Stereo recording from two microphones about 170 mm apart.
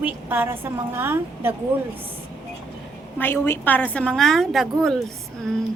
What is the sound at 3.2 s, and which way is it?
A woman's voice, 10° left (ahead or behind).